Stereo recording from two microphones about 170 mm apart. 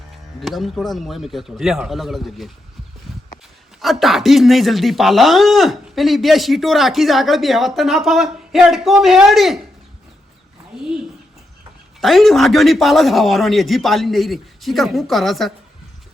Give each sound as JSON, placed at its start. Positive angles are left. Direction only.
{"t": 0.3, "sound": "speech", "side_deg": 0}
{"t": 3.8, "sound": "speech", "side_deg": 0}
{"t": 11.9, "sound": "speech", "side_deg": 0}